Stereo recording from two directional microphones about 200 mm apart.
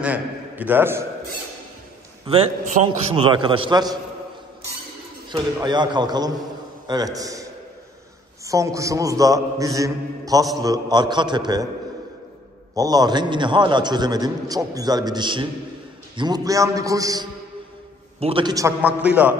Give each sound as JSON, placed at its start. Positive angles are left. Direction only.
{"t": 0.0, "sound": "a man's voice", "side_deg": -10}
{"t": 2.2, "sound": "a man's voice", "side_deg": -30}
{"t": 5.3, "sound": "a man's voice", "side_deg": -20}
{"t": 8.5, "sound": "a man's voice", "side_deg": -15}
{"t": 12.7, "sound": "a man's voice", "side_deg": -20}